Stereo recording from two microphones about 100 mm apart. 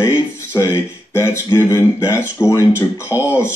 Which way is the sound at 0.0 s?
30° left (ahead or behind).